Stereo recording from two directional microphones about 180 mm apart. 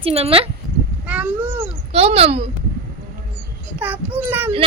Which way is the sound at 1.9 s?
35° right (ahead or behind).